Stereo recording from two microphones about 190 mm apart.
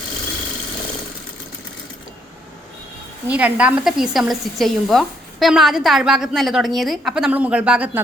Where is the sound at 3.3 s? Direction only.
5° right (ahead or behind).